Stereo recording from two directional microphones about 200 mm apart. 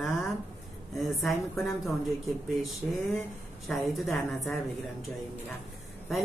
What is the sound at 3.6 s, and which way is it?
Speech, centre (ahead or behind).